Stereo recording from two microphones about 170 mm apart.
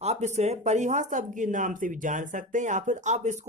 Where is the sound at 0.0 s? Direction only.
40° right (ahead or behind).